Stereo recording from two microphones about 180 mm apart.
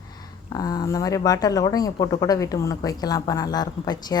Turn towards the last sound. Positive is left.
turn(degrees=20)  # may be behind; listen again after turning